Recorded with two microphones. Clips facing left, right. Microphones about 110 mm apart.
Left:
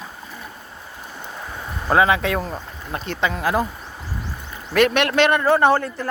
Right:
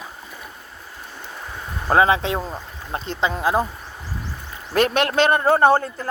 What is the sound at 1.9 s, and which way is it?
A man's voice, 30° right (ahead or behind).